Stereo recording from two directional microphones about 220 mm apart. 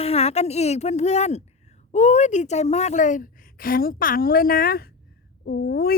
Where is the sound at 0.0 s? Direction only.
30° left (ahead or behind).